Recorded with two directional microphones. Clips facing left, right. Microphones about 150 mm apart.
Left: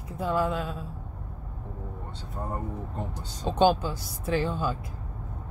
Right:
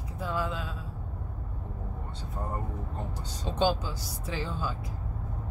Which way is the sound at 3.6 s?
55° left (ahead or behind).